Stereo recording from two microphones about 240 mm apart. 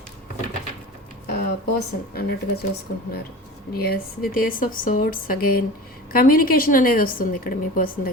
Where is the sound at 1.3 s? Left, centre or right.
Left.